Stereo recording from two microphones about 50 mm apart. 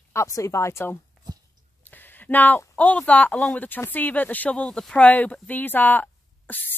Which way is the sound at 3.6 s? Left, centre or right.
Left.